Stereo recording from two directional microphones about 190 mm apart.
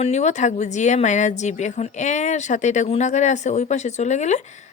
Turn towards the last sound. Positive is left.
turn(degrees=40)  # may be behind; listen again after turning